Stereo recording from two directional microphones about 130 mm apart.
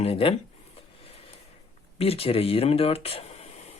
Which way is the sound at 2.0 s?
50° left (ahead or behind).